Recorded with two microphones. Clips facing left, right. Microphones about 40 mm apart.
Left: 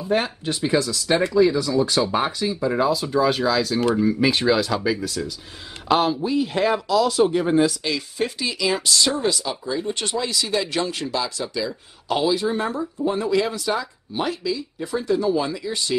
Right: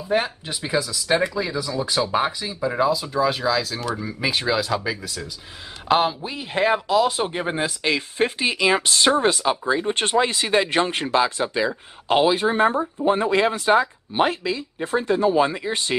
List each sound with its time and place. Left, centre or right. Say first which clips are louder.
0.1 s speech: even; centre
5.9 s speech: left 1 dB; centre; by 16.0 s right